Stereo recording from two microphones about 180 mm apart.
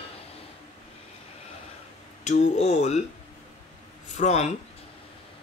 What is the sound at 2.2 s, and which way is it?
Speech, 40° left (ahead or behind).